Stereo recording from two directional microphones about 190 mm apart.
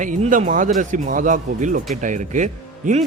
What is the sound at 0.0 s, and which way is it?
Speech, 40° right (ahead or behind).